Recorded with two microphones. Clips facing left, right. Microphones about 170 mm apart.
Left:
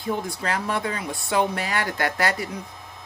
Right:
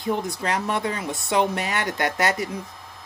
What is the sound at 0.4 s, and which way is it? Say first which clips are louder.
Speech: right 1 dB; 20° right (ahead or behind).